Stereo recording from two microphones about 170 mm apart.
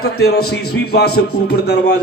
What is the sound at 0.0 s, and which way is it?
A man's voice, 70° left (ahead or behind).